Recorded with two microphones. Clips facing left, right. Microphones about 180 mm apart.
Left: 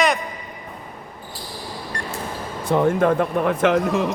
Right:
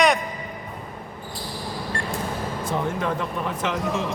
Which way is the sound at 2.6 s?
55° left (ahead or behind).